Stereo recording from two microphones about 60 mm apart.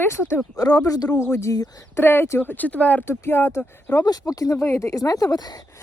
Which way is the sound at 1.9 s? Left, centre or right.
Left.